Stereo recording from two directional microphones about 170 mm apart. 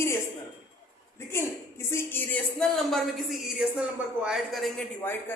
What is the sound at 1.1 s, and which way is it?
A woman's voice, 15° left (ahead or behind).